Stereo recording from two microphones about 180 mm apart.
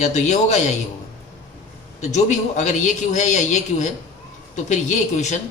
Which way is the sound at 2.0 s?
40° left (ahead or behind).